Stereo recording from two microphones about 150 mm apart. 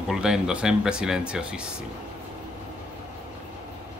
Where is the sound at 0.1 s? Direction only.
5° right (ahead or behind).